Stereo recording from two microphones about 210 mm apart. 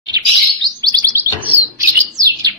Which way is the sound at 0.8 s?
15° right (ahead or behind).